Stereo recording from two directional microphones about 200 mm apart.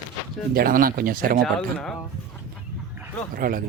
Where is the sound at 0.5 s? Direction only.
45° right (ahead or behind).